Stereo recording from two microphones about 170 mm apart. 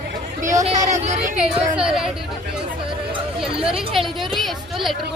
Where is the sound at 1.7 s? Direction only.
5° right (ahead or behind).